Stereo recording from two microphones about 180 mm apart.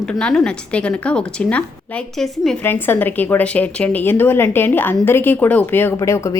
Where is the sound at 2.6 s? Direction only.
10° left (ahead or behind).